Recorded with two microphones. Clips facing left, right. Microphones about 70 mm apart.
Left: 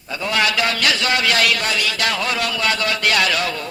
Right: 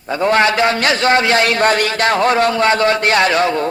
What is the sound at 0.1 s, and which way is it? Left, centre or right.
A man's voice, right.